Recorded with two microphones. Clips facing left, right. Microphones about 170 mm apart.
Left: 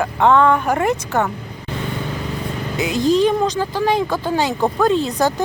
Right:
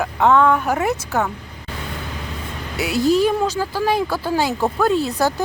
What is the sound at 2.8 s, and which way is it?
Speech, 10° right (ahead or behind).